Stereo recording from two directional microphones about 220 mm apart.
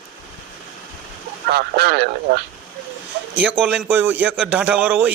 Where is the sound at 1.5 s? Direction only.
50° right (ahead or behind).